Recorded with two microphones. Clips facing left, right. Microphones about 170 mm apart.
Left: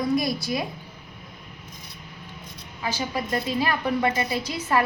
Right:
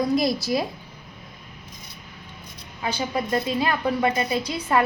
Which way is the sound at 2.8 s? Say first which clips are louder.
Right 2 dB; 20° right (ahead or behind).